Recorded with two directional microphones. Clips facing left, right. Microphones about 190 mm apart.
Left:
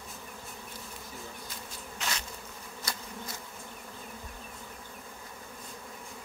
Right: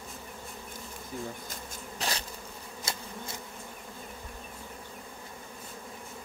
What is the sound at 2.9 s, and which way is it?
Bee, 25° right (ahead or behind).